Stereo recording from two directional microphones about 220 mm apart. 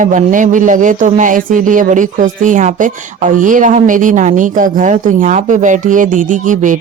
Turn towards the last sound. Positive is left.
turn(degrees=-35)  # may be behind; listen again after turning